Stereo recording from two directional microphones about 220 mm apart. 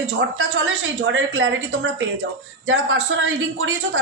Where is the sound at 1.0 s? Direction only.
55° right (ahead or behind).